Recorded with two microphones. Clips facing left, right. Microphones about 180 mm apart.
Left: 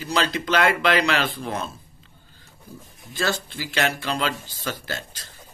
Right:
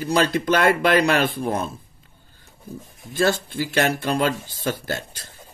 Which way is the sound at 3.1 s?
50° right (ahead or behind).